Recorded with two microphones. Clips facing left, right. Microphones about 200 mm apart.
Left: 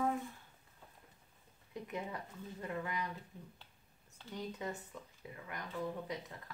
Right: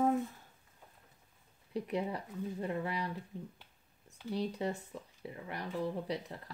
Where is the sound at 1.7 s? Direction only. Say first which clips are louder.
Right 7 dB; 35° right (ahead or behind).